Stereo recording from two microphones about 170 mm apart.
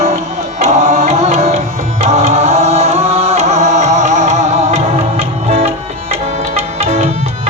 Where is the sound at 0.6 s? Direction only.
40° right (ahead or behind).